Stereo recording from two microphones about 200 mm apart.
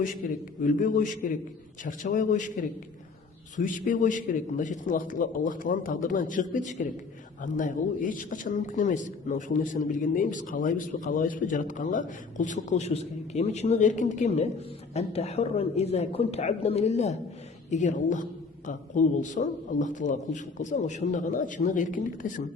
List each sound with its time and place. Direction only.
0.2 s a man's voice: 40° left (ahead or behind)
3.5 s a man's voice: 40° left (ahead or behind)